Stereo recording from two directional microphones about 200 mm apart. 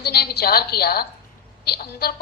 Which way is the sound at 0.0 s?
55° left (ahead or behind).